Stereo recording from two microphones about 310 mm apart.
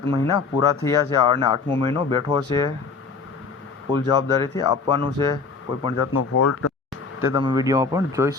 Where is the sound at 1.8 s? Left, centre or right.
Centre.